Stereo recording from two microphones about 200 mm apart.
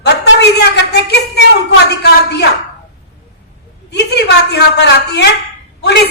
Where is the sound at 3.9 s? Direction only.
55° left (ahead or behind).